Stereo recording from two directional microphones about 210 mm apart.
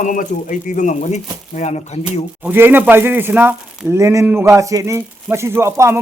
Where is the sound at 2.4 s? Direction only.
10° right (ahead or behind).